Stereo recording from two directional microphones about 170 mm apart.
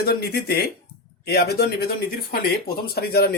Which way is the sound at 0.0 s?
65° left (ahead or behind).